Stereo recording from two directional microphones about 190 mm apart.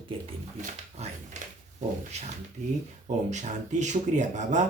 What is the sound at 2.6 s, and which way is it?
Speech, 40° right (ahead or behind).